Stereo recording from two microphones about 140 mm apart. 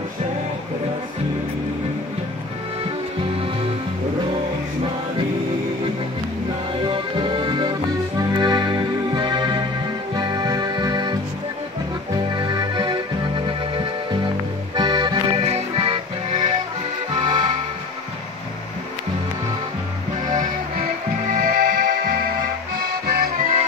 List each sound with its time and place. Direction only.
6.9 s music: 35° right (ahead or behind)
17.1 s music: 35° right (ahead or behind)
21.3 s music: 90° right